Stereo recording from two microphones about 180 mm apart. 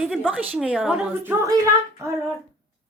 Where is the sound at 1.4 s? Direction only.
15° right (ahead or behind).